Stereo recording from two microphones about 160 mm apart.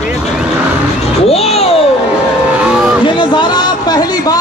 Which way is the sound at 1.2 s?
40° left (ahead or behind).